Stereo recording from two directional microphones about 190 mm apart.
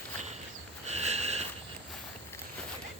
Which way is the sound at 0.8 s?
35° right (ahead or behind).